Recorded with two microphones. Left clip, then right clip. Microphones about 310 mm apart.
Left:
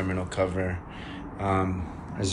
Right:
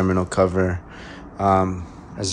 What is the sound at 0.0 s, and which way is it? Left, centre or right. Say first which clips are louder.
Speech: right 9 dB; right.